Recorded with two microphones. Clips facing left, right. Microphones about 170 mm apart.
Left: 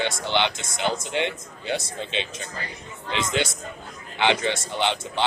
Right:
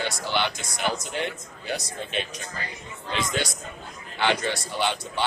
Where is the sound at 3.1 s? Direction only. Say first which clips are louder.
Left 2 dB; 20° left (ahead or behind).